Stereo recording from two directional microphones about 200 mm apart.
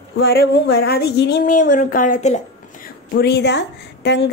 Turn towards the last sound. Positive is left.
turn(degrees=55)  # may be behind; listen again after turning